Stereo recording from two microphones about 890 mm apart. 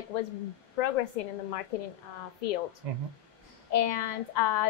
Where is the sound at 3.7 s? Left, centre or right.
Left.